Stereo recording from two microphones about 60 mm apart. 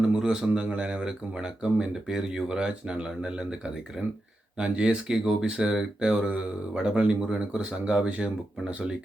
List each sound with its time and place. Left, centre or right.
0.2 s speech: centre